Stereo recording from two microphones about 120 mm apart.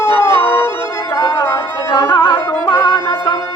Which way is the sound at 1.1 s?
35° left (ahead or behind).